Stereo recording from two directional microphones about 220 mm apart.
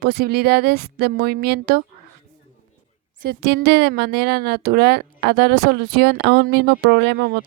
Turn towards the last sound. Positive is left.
turn(degrees=-45)  # may be behind; listen again after turning